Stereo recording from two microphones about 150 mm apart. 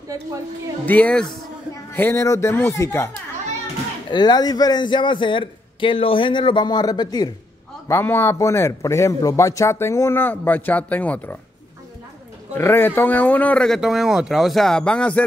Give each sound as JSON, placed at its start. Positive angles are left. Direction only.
{"t": 0.1, "sound": "speech", "side_deg": -20}
{"t": 0.8, "sound": "a man's voice", "side_deg": 10}
{"t": 4.1, "sound": "a man's voice", "side_deg": 30}
{"t": 7.9, "sound": "a man's voice", "side_deg": 15}
{"t": 12.5, "sound": "a man's voice", "side_deg": 15}